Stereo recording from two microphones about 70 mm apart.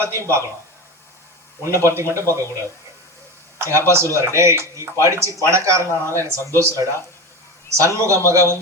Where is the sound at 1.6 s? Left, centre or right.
Right.